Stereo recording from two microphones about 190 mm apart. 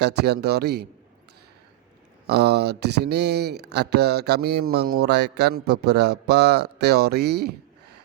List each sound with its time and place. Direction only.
0.0 s speech: 60° right (ahead or behind)
2.2 s speech: 60° right (ahead or behind)